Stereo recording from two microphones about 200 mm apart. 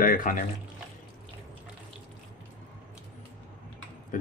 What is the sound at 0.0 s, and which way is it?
Speech, 45° left (ahead or behind).